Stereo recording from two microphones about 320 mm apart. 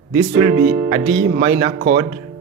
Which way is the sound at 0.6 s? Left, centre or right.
Right.